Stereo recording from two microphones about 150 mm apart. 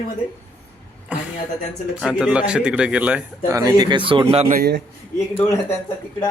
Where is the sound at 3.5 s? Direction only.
25° right (ahead or behind).